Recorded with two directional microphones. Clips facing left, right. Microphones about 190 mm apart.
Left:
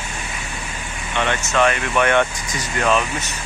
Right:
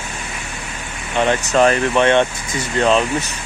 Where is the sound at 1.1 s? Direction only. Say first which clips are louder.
Right 4 dB; 35° right (ahead or behind).